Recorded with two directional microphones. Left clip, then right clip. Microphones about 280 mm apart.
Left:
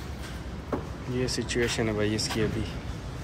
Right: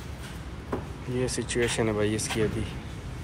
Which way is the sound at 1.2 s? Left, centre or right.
Centre.